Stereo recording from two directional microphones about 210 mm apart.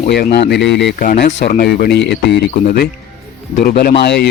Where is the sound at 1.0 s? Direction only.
40° left (ahead or behind).